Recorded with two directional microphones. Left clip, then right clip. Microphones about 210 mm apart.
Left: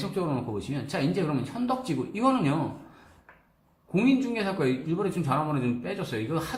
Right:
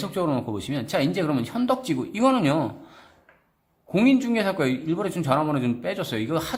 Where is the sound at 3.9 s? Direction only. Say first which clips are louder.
Right 5 dB; 40° right (ahead or behind).